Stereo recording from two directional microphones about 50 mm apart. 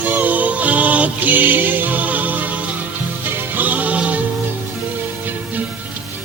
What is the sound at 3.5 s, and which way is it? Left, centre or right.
Music, right.